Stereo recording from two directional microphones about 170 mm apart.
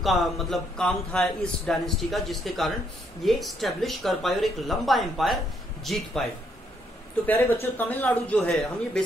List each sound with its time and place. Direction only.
0.0 s a man's voice: centre (ahead or behind)
7.2 s speech: 10° left (ahead or behind)